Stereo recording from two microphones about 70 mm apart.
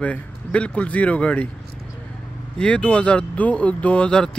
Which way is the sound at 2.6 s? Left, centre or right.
Centre.